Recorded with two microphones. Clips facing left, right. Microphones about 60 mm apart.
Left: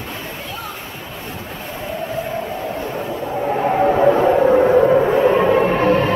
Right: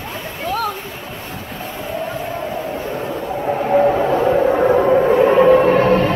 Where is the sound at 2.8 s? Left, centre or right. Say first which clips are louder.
Even; centre.